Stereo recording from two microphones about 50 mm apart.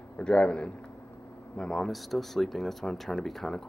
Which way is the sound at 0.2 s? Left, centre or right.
Centre.